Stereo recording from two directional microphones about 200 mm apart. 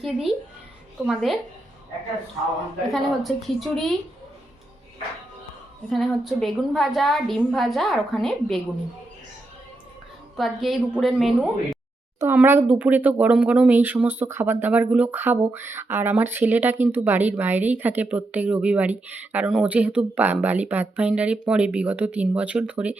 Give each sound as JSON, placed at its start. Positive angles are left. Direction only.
{"t": 0.0, "sound": "a woman's voice", "side_deg": 0}
{"t": 2.9, "sound": "a woman's voice", "side_deg": 0}
{"t": 5.9, "sound": "a woman's voice", "side_deg": 0}
{"t": 10.3, "sound": "a woman's voice", "side_deg": 0}